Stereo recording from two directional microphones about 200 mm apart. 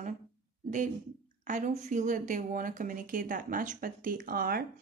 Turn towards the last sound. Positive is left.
turn(degrees=-45)  # may be behind; listen again after turning